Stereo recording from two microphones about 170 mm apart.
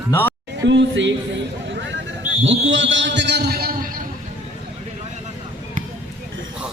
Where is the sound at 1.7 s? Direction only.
90° right.